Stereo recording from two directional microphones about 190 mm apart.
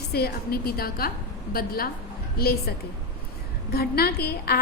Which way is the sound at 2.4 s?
55° left (ahead or behind).